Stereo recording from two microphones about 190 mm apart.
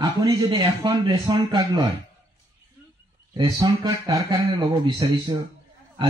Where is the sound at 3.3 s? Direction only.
25° right (ahead or behind).